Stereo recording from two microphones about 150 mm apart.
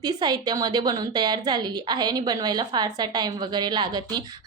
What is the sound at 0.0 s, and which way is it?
A woman's voice, 25° right (ahead or behind).